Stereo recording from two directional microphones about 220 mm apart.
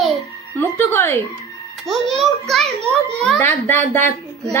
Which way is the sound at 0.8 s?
10° left (ahead or behind).